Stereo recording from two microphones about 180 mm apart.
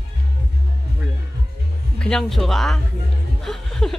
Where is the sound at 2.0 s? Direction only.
5° left (ahead or behind).